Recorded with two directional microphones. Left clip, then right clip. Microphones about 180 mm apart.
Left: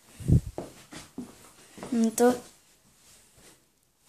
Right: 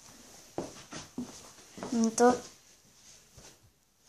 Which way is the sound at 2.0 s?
20° left (ahead or behind).